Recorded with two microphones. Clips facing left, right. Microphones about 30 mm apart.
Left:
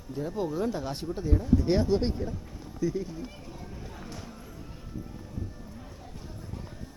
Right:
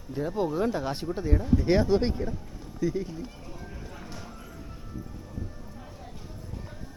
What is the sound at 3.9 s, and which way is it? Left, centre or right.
Music, centre.